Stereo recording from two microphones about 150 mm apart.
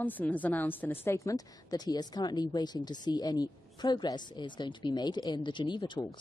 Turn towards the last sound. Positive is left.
turn(degrees=30)  # may be behind; listen again after turning